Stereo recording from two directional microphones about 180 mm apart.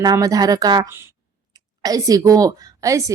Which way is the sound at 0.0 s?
20° right (ahead or behind).